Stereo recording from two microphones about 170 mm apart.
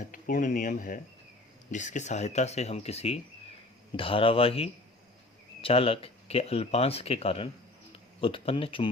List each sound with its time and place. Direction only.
0.0 s speech: 50° left (ahead or behind); by 8.9 s 30° left (ahead or behind)